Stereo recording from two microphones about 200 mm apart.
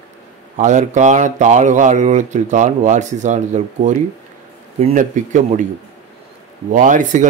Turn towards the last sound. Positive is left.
turn(degrees=-40)  # may be behind; listen again after turning